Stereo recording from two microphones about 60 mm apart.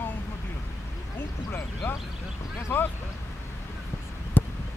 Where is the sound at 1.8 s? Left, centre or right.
Left.